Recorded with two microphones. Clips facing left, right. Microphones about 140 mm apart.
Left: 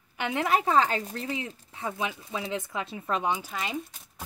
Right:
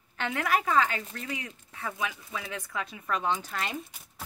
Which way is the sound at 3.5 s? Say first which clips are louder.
Even; 10° left (ahead or behind).